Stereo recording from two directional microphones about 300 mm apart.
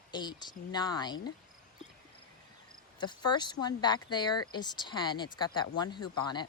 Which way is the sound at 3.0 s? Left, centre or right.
Centre.